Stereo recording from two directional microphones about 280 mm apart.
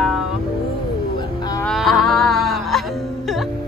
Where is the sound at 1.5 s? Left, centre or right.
Centre.